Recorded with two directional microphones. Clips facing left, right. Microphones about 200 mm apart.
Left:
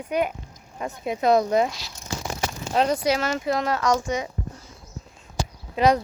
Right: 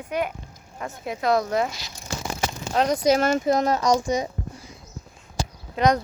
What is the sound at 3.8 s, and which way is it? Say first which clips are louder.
Speech: right 2 dB; 15° right (ahead or behind).